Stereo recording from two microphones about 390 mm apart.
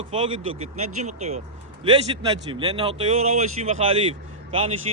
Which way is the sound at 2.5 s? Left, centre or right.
Centre.